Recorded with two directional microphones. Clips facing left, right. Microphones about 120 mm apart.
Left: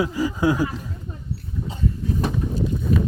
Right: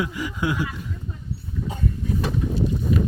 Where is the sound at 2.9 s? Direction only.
40° left (ahead or behind).